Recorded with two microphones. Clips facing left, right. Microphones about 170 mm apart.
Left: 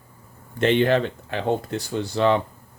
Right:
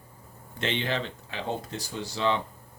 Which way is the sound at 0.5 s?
50° left (ahead or behind).